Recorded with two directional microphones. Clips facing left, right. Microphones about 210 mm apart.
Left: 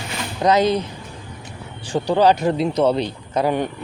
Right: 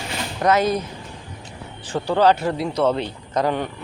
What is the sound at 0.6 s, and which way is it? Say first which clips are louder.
Speech: left 3 dB; 30° left (ahead or behind).